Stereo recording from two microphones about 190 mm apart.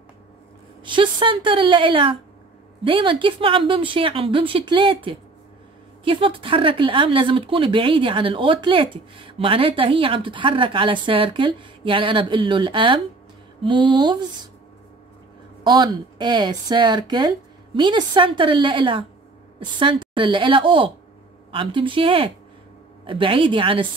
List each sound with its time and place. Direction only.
0.8 s speech: 25° right (ahead or behind)
15.6 s speech: 25° right (ahead or behind)